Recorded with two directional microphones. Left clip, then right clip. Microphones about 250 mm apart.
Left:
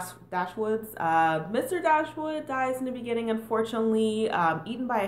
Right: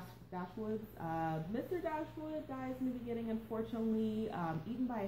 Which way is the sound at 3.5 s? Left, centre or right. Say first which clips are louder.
Left 14 dB; centre.